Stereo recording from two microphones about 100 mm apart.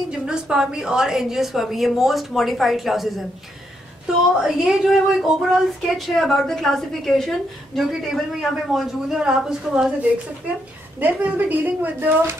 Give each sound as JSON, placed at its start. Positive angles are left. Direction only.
{"t": 0.3, "sound": "speech", "side_deg": -5}
{"t": 4.4, "sound": "speech", "side_deg": -5}
{"t": 11.0, "sound": "speech", "side_deg": -15}